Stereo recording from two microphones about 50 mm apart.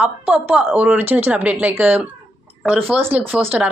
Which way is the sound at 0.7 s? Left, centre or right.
Right.